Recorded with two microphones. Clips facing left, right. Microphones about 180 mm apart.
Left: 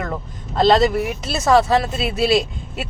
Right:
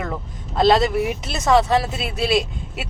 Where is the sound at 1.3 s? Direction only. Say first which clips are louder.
Left 2 dB; 5° left (ahead or behind).